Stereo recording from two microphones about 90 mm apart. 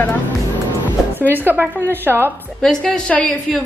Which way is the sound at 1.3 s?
20° right (ahead or behind).